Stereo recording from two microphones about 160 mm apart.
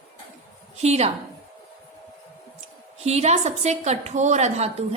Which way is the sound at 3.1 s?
45° right (ahead or behind).